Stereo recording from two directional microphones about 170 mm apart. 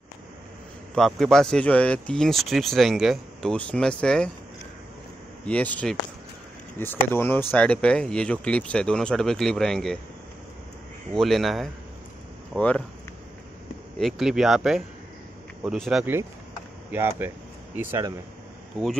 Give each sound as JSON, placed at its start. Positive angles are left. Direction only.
{"t": 0.9, "sound": "speech", "side_deg": 0}
{"t": 5.5, "sound": "speech", "side_deg": 10}
{"t": 11.1, "sound": "speech", "side_deg": 0}
{"t": 13.9, "sound": "speech", "side_deg": 0}
{"t": 16.9, "sound": "speech", "side_deg": -15}